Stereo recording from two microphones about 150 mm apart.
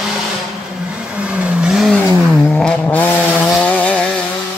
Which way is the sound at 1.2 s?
10° right (ahead or behind).